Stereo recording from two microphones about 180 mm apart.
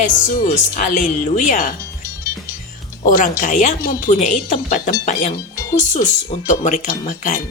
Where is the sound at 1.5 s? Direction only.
50° left (ahead or behind).